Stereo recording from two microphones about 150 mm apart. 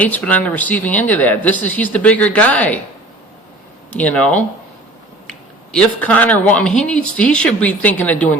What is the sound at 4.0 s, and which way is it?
Speech, 10° left (ahead or behind).